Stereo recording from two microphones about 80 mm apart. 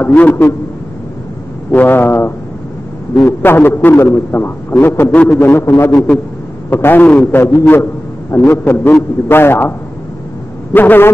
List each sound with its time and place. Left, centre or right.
0.0 s a man's voice: left
1.7 s a man's voice: left
6.7 s a man's voice: left